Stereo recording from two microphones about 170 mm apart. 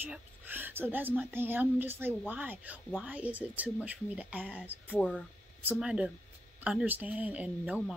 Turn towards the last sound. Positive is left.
turn(degrees=-10)  # may be behind; listen again after turning